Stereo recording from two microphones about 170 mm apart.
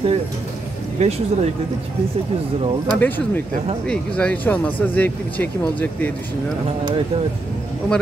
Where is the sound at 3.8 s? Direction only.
5° left (ahead or behind).